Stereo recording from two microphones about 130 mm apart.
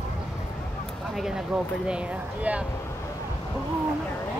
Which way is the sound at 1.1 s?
5° right (ahead or behind).